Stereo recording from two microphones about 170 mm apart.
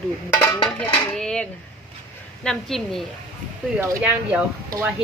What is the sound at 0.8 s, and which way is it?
A woman's voice, 5° left (ahead or behind).